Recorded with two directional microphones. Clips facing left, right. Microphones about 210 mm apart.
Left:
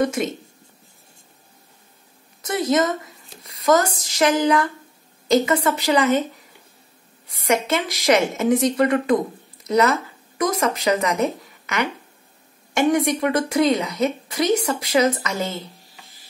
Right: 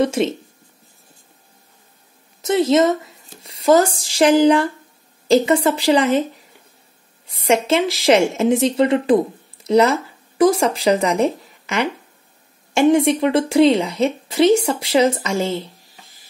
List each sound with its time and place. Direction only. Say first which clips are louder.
0.0 s a woman's voice: right 4 dB; 30° right (ahead or behind)
2.4 s a woman's voice: right 5 dB; 25° right (ahead or behind)
7.4 s a woman's voice: right 4 dB; 25° right (ahead or behind)